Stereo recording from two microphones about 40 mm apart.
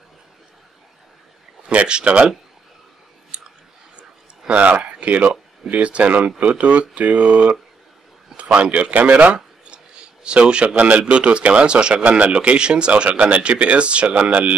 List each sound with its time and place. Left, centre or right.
1.9 s speech: right
3.3 s clicking: right
4.5 s a man's voice: right